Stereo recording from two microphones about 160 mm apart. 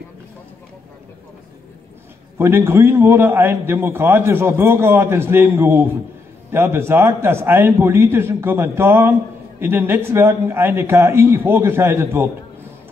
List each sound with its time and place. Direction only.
2.3 s a man's voice: 15° right (ahead or behind)